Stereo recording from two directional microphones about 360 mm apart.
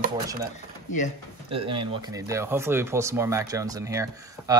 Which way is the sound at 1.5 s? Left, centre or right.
Centre.